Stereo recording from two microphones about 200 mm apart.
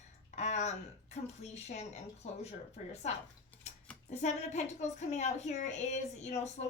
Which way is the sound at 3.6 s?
35° left (ahead or behind).